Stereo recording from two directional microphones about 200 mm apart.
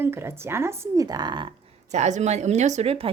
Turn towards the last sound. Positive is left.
turn(degrees=-30)  # may be behind; listen again after turning